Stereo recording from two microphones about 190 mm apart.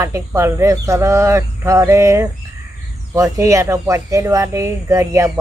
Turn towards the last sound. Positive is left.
turn(degrees=-15)  # may be behind; listen again after turning